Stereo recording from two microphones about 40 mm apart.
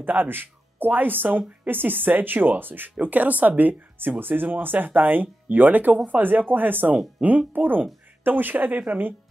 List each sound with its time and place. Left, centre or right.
0.0 s speech: right
3.0 s speech: right